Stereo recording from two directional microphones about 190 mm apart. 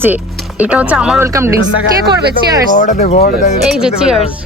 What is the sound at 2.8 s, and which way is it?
Speech, 40° left (ahead or behind).